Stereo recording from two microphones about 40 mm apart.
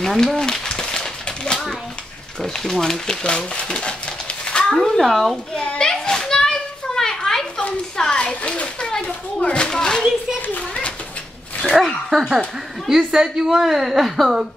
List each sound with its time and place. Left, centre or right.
0.0 s speech: centre
0.4 s a sound: centre
2.4 s speech: centre
3.3 s a child's voice: left
4.5 s a sound: left
4.7 s a woman's voice: centre
5.8 s children playing: centre
8.0 s a child's voice: left
11.7 s a woman's voice: centre